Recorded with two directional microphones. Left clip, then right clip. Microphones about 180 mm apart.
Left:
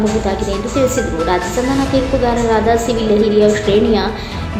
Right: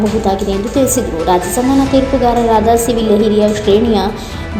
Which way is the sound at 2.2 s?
30° right (ahead or behind).